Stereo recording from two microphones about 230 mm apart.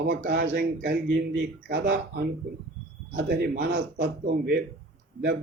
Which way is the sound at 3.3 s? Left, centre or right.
Right.